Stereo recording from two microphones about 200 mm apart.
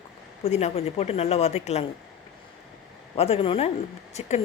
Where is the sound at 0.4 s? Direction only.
35° left (ahead or behind).